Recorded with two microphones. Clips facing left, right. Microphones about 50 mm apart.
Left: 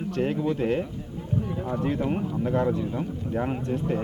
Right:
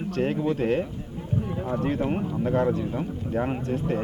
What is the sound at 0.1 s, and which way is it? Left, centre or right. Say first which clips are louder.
Speech: right 1 dB; centre.